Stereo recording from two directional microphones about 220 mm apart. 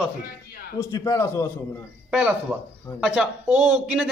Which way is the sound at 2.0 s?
5° right (ahead or behind).